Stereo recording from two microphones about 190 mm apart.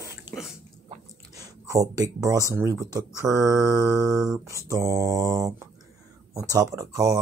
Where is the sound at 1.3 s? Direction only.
20° right (ahead or behind).